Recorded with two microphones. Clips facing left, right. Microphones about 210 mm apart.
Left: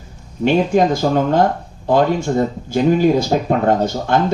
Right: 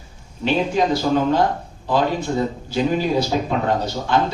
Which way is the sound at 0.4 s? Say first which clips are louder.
Left 5 dB; 50° left (ahead or behind).